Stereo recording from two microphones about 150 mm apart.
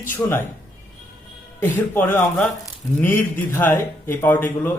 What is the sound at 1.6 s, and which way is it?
Speech, 15° left (ahead or behind).